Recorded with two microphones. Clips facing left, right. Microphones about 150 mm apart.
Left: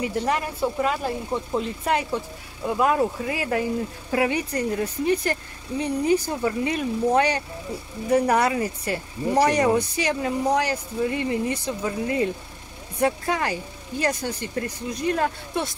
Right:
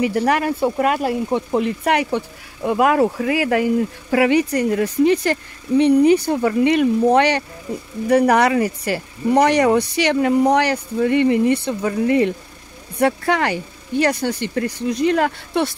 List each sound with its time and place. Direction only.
0.0 s speech: 75° right (ahead or behind)